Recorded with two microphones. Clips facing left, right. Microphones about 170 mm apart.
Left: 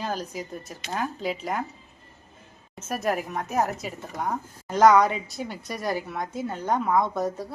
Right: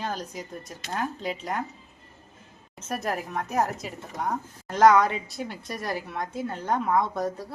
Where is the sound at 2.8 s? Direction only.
5° left (ahead or behind).